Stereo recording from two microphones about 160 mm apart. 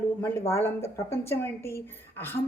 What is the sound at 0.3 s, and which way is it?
A woman's voice, 15° left (ahead or behind).